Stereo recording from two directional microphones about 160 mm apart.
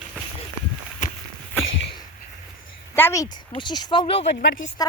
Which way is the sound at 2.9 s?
15° left (ahead or behind).